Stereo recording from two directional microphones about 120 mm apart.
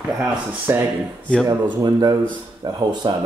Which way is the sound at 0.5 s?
15° right (ahead or behind).